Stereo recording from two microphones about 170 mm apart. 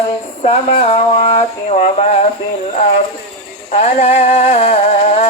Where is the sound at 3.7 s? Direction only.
35° left (ahead or behind).